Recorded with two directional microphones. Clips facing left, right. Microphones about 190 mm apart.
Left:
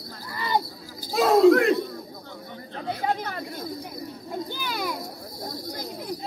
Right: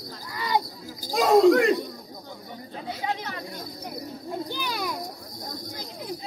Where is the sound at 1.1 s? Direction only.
Centre (ahead or behind).